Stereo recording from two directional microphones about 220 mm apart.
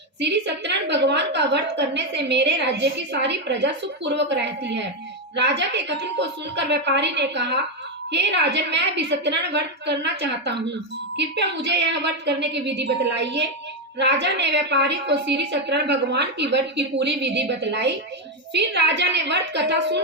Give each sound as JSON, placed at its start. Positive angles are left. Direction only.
{"t": 0.2, "sound": "a woman's voice", "side_deg": -50}